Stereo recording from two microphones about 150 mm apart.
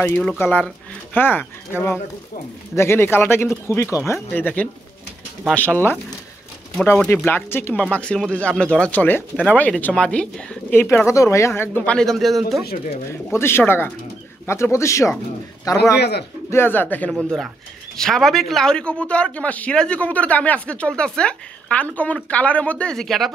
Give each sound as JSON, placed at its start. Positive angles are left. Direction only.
{"t": 0.0, "sound": "speech", "side_deg": 10}
{"t": 2.7, "sound": "speech", "side_deg": 15}
{"t": 13.1, "sound": "speech", "side_deg": 15}
{"t": 16.0, "sound": "speech", "side_deg": 90}
{"t": 16.4, "sound": "speech", "side_deg": 15}
{"t": 17.1, "sound": "speech", "side_deg": 0}